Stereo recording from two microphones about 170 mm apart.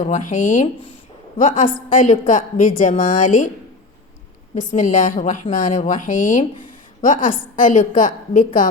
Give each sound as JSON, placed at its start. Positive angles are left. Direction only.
{"t": 0.0, "sound": "a woman's voice", "side_deg": 50}
{"t": 4.5, "sound": "a woman's voice", "side_deg": 50}